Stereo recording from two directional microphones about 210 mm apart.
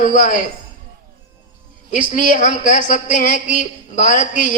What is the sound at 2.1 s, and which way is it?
A man's voice, 35° left (ahead or behind).